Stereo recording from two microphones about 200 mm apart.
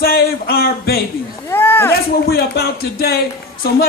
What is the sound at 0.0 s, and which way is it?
Speech, 50° left (ahead or behind).